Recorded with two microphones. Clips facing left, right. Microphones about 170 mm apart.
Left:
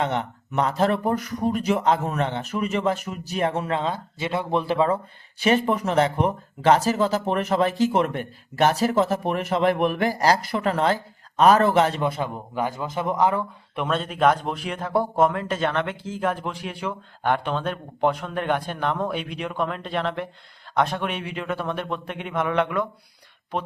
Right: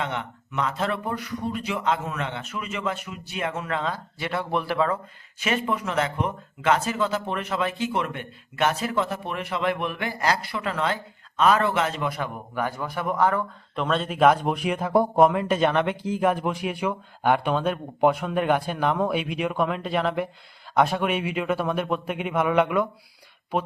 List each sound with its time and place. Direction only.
0.0 s speech: 35° left (ahead or behind)
5.4 s speech: 35° left (ahead or behind); by 13.8 s 15° left (ahead or behind)
13.8 s a man's voice: centre (ahead or behind)